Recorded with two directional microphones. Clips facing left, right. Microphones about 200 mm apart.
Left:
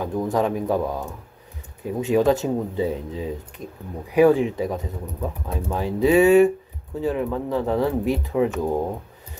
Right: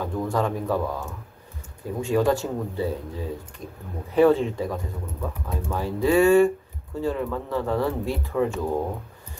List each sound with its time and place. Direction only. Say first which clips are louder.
0.0 s speech: left 3 dB; 20° left (ahead or behind)